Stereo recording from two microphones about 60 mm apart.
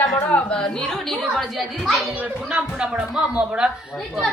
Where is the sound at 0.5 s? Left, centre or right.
Centre.